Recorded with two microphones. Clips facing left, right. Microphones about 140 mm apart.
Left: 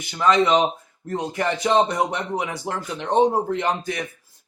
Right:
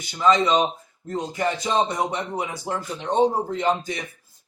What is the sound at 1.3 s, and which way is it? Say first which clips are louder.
Speech: left 4 dB; 60° left (ahead or behind).